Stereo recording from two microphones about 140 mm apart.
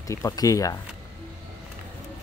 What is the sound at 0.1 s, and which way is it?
Speech, 25° left (ahead or behind).